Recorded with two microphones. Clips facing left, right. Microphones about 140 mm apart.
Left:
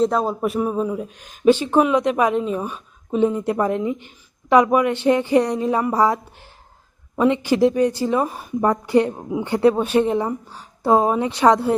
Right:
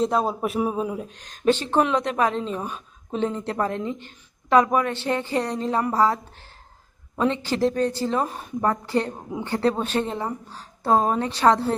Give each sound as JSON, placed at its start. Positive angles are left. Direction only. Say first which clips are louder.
{"t": 0.0, "sound": "a man's voice", "louder": "left 3 dB", "side_deg": 0}
{"t": 1.0, "sound": "a woman's voice", "louder": "left 7 dB", "side_deg": 5}
{"t": 8.6, "sound": "a woman's voice", "louder": "left 6 dB", "side_deg": 15}